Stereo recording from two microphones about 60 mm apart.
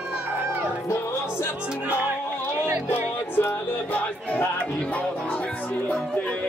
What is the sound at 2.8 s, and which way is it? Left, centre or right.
Music, left.